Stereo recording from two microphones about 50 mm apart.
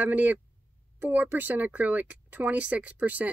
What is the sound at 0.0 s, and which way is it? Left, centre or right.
Speech, right.